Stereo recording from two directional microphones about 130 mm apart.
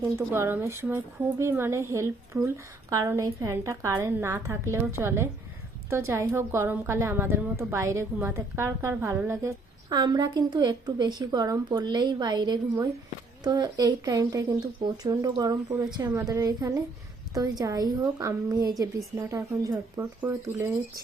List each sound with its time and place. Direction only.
0.0 s speech: 15° right (ahead or behind)
9.9 s a woman's voice: 30° right (ahead or behind)